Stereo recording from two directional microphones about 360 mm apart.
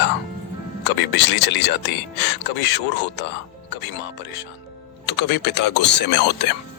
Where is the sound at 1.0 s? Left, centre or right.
Left.